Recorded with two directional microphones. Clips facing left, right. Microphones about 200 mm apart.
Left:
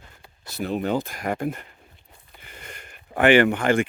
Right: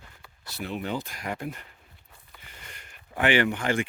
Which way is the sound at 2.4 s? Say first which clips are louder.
Left 7 dB; 55° left (ahead or behind).